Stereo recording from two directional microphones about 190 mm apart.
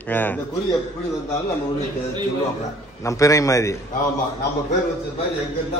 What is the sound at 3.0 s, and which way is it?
Speech, 15° left (ahead or behind).